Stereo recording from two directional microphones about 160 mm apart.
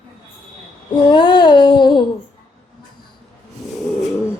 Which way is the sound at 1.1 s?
30° left (ahead or behind).